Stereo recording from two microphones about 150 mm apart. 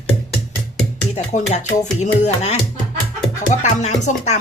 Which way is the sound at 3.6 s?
50° left (ahead or behind).